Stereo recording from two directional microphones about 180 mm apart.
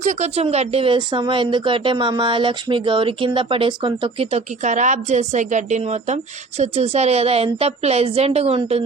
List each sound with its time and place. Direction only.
0.0 s a woman's voice: 40° right (ahead or behind)